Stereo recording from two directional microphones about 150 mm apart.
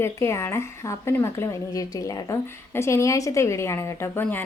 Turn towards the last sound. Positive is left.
turn(degrees=15)  # may be behind; listen again after turning